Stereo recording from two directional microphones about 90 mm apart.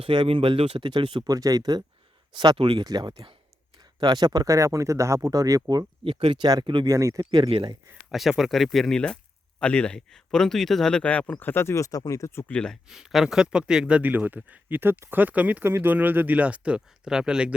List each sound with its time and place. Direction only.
0.0 s speech: 75° right (ahead or behind)
1.2 s speech: 40° right (ahead or behind); by 2.8 s 60° right (ahead or behind)
2.8 s speech: 50° right (ahead or behind)
6.1 s speech: 85° right
6.8 s speech: 40° right (ahead or behind)
7.3 s speech: 80° right
8.1 s speech: 5° right (ahead or behind); by 12.5 s 30° left (ahead or behind)
12.5 s speech: 10° left (ahead or behind)
12.9 s speech: 5° right (ahead or behind)